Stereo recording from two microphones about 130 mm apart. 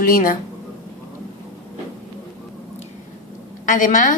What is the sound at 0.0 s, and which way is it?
Speech, 90° left.